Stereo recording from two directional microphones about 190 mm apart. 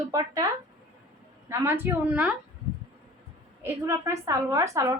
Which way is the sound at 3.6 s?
15° right (ahead or behind).